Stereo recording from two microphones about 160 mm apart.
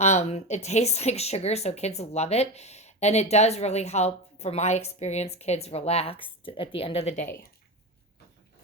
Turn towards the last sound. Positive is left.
turn(degrees=45)  # may be behind; listen again after turning